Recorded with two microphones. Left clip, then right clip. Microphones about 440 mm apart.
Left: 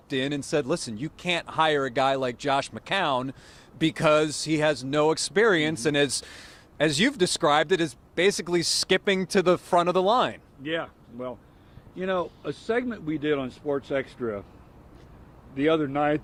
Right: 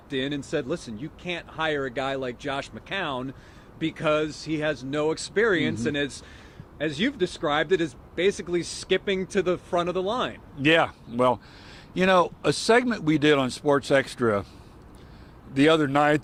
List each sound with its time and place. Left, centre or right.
0.1 s speech: left
10.6 s speech: right
11.9 s speech: right
15.5 s speech: right